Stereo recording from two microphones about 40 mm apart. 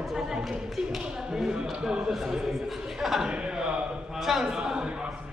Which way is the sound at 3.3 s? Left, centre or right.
Right.